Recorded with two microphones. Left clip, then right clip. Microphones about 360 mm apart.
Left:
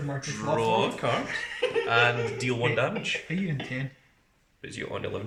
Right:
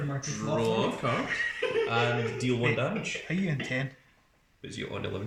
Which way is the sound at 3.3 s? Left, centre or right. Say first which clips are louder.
Right 1 dB; centre.